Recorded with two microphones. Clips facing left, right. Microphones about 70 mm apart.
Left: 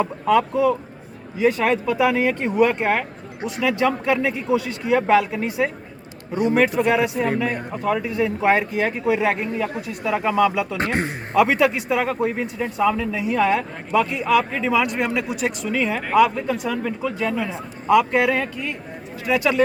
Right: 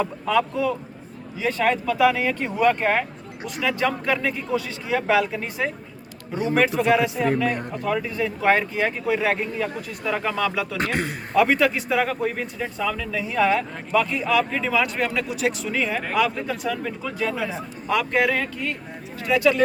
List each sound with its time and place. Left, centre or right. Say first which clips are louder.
0.0 s speech: left 3 dB; centre
10.8 s a man's voice: left 2 dB; left
11.3 s speech: left 2 dB; centre
13.2 s speech: left 1 dB; centre